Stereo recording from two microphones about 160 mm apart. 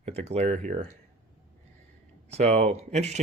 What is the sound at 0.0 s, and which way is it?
Speech, 45° right (ahead or behind).